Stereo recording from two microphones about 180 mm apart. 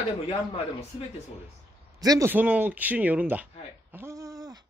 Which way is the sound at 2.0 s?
20° right (ahead or behind).